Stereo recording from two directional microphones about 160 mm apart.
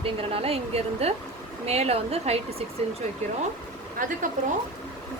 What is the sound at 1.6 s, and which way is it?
A woman's voice, 40° right (ahead or behind).